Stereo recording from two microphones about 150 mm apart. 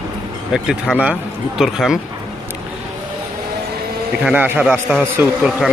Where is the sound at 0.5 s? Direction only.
5° right (ahead or behind).